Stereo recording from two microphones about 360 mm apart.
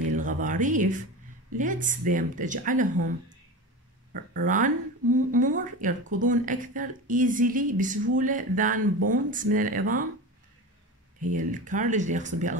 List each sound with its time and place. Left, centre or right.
0.1 s speech: right
11.3 s speech: right